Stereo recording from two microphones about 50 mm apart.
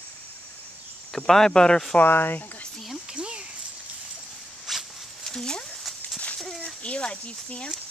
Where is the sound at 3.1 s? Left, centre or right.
Centre.